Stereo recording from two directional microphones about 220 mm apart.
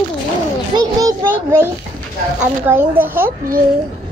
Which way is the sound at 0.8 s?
15° right (ahead or behind).